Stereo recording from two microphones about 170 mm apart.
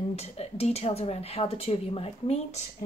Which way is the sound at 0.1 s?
40° left (ahead or behind).